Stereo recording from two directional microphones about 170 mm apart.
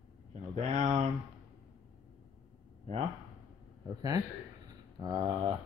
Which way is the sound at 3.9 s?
20° right (ahead or behind).